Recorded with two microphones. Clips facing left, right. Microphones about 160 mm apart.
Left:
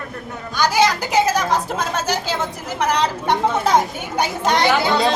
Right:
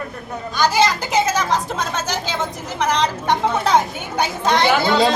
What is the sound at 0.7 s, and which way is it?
A woman's voice, 10° left (ahead or behind).